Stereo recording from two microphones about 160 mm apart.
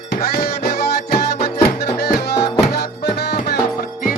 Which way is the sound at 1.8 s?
90° left.